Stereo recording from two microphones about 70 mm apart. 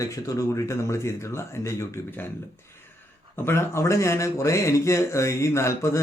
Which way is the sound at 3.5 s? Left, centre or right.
Left.